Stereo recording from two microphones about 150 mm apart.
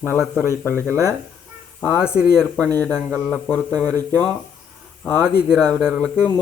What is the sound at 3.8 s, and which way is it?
Speech, 20° right (ahead or behind).